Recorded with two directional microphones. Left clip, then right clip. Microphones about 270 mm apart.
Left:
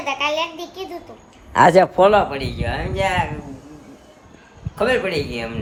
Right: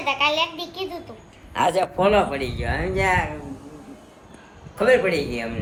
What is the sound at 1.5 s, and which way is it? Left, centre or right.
Speech, left.